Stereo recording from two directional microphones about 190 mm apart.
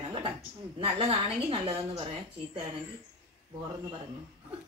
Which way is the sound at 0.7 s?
30° right (ahead or behind).